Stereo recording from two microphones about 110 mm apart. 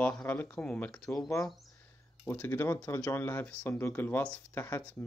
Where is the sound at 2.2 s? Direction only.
20° left (ahead or behind).